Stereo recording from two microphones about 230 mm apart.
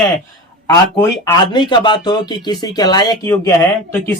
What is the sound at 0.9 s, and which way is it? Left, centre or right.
A man's voice, centre.